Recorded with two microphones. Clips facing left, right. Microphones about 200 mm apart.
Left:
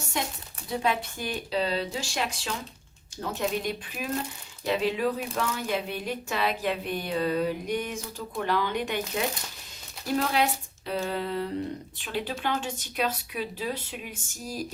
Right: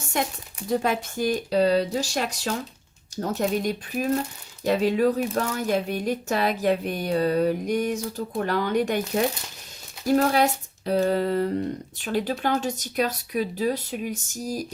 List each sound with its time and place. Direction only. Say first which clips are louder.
0.7 s speech: right 4 dB; 45° right (ahead or behind)